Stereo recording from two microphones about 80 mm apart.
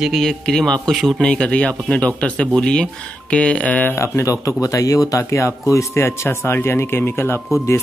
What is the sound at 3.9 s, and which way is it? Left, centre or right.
Speech, left.